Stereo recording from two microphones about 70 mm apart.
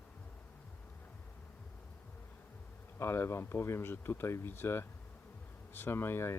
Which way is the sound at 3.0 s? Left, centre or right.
Left.